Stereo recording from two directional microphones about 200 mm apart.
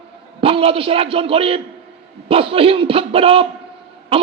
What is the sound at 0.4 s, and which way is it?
A man's voice, 30° right (ahead or behind).